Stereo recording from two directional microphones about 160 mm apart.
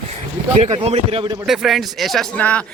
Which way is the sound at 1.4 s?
Centre (ahead or behind).